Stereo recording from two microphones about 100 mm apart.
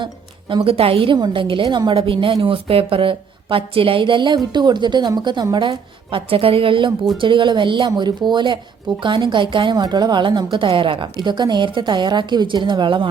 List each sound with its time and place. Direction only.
0.5 s a woman's voice: 70° right (ahead or behind); by 13.1 s 50° right (ahead or behind)